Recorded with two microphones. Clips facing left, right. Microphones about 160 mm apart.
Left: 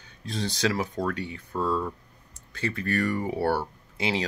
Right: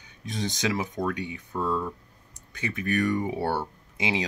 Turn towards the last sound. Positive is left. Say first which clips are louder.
# even
turn(degrees=-15)  # may be behind; listen again after turning